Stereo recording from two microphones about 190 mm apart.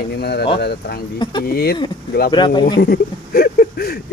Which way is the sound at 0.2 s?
60° left (ahead or behind).